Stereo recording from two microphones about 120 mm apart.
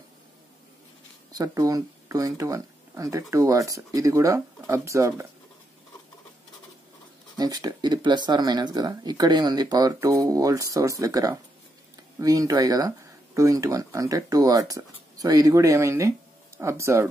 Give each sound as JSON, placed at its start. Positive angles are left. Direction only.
{"t": 1.3, "sound": "speech", "side_deg": -30}
{"t": 7.3, "sound": "speech", "side_deg": -35}